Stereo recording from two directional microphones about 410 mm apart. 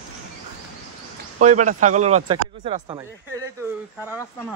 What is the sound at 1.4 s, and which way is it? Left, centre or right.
Speech, centre.